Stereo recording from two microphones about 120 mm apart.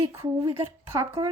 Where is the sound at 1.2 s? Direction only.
55° right (ahead or behind).